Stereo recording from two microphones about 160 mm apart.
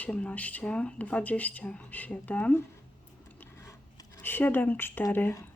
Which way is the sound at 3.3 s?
20° left (ahead or behind).